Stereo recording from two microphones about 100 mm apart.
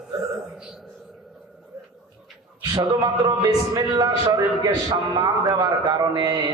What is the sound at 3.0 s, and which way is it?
A man's voice, 40° right (ahead or behind).